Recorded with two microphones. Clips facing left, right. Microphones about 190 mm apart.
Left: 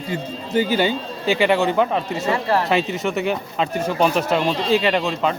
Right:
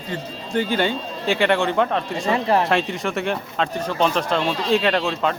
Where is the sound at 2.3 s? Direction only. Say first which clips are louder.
Right 1 dB; 20° right (ahead or behind).